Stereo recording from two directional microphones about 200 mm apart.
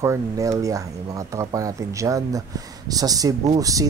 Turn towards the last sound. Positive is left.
turn(degrees=-15)  # may be behind; listen again after turning